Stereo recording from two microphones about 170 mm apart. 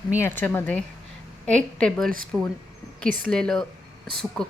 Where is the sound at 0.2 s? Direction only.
10° left (ahead or behind).